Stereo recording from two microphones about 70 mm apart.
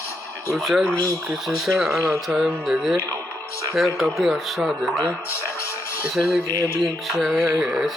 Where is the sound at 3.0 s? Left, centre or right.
Left.